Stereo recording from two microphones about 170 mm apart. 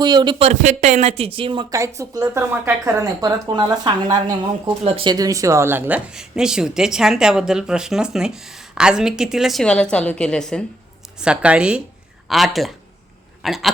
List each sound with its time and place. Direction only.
0.0 s speech: 25° right (ahead or behind)
2.0 s speech: 20° right (ahead or behind); by 10.6 s 5° left (ahead or behind)
11.2 s speech: 5° right (ahead or behind)